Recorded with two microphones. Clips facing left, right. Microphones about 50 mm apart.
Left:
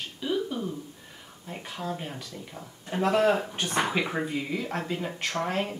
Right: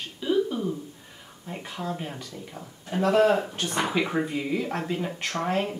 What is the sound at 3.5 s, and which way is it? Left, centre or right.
Speech, centre.